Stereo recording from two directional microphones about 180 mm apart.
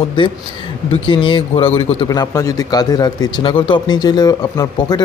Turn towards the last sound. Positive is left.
turn(degrees=20)  # may be behind; listen again after turning